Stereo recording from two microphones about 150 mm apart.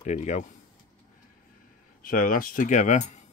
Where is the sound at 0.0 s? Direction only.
50° left (ahead or behind).